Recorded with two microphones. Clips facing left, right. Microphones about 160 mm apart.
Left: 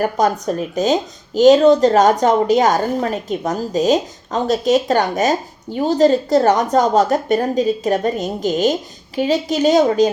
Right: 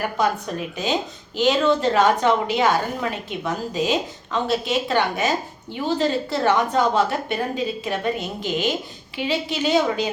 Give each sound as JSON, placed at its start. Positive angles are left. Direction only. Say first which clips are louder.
{"t": 0.0, "sound": "a woman's voice", "louder": "left 6 dB", "side_deg": 40}